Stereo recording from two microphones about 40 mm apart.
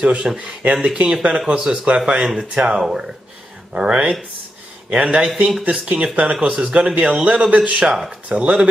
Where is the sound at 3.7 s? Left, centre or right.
Right.